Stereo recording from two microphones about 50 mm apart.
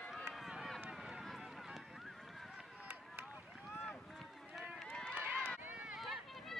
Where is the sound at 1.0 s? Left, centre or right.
Centre.